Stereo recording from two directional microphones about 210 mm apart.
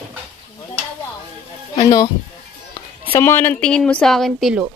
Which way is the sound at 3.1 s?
10° left (ahead or behind).